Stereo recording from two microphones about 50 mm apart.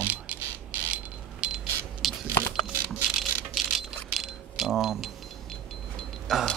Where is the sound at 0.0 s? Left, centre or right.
Right.